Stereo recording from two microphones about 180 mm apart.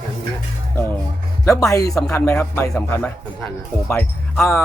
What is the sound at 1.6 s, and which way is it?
Speech, 20° left (ahead or behind).